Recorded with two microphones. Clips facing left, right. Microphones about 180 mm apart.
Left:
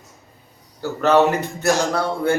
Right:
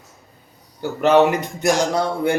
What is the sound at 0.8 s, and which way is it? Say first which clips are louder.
A man's voice: right 1 dB; 15° right (ahead or behind).